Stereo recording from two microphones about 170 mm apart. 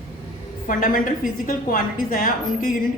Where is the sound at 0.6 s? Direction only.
50° left (ahead or behind).